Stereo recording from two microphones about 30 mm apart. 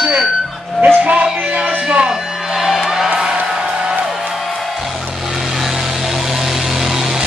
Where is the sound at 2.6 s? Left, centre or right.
Centre.